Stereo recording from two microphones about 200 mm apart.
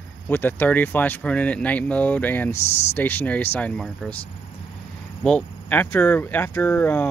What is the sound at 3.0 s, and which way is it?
Speech, 10° left (ahead or behind).